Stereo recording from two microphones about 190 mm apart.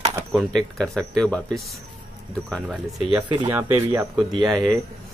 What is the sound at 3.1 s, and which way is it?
Speech, 25° right (ahead or behind).